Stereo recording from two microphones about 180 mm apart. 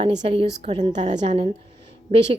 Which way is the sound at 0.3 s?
35° right (ahead or behind).